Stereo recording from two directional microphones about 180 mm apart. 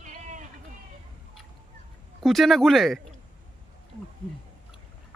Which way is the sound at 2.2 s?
Centre (ahead or behind).